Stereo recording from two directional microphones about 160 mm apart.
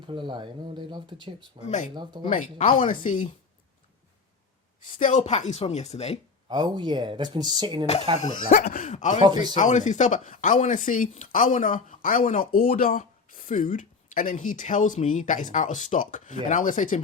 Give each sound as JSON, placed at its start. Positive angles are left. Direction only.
{"t": 0.0, "sound": "speech", "side_deg": -30}
{"t": 1.6, "sound": "speech", "side_deg": 50}
{"t": 1.9, "sound": "speech", "side_deg": -30}
{"t": 2.3, "sound": "speech", "side_deg": 55}
{"t": 4.9, "sound": "speech", "side_deg": 50}
{"t": 6.5, "sound": "speech", "side_deg": -25}
{"t": 8.2, "sound": "speech", "side_deg": 50}
{"t": 9.2, "sound": "speech", "side_deg": -25}
{"t": 9.6, "sound": "speech", "side_deg": 50}